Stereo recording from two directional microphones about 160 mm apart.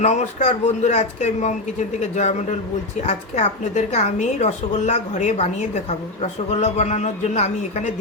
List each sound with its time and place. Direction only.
0.0 s a woman's voice: 45° left (ahead or behind)